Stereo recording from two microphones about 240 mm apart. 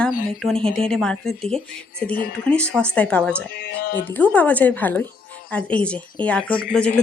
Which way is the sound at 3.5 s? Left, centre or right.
Left.